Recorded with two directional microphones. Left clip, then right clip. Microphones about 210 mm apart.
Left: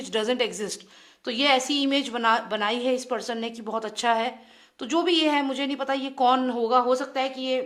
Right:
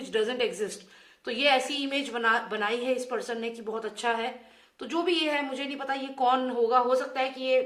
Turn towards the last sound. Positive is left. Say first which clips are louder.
# even
turn(degrees=45)  # may be behind; listen again after turning